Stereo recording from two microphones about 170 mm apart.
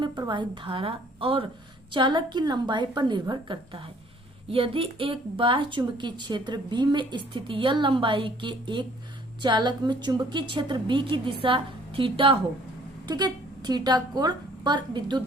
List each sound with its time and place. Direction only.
0.0 s a woman's voice: 25° right (ahead or behind)